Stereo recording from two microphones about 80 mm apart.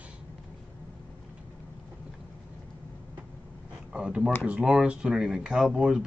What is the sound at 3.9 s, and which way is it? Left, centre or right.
Speech, centre.